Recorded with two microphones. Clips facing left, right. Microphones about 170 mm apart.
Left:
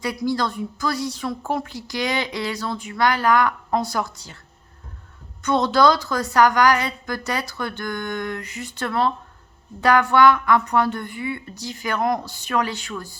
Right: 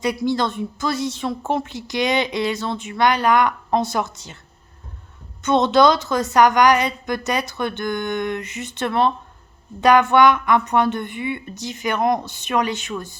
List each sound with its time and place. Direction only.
0.0 s a woman's voice: 20° right (ahead or behind)
5.4 s a woman's voice: 20° right (ahead or behind)